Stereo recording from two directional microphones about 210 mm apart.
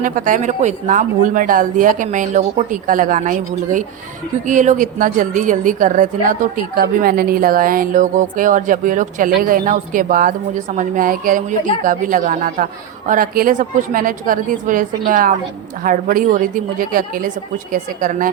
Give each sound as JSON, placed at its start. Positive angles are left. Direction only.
{"t": 0.0, "sound": "a woman's voice", "side_deg": -40}